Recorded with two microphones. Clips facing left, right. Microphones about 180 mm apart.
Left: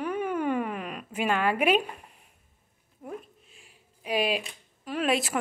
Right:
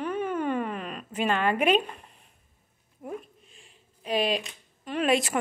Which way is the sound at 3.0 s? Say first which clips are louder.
Right 2 dB; centre (ahead or behind).